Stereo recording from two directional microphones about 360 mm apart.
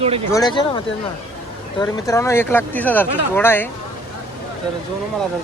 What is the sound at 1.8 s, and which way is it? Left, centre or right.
Speech, centre.